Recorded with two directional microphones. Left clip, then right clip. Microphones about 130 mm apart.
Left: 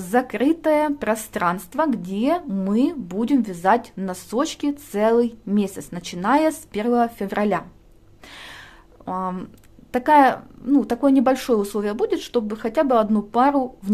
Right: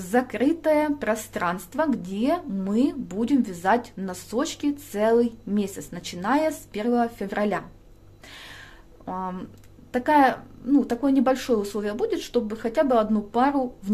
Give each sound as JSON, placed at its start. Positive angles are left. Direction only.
{"t": 0.0, "sound": "a woman's voice", "side_deg": 35}
{"t": 9.0, "sound": "a woman's voice", "side_deg": 35}